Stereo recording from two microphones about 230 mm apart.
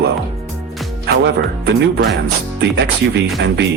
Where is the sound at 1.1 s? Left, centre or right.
Right.